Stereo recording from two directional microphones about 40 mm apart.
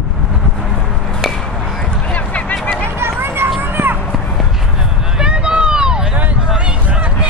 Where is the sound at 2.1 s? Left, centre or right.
Left.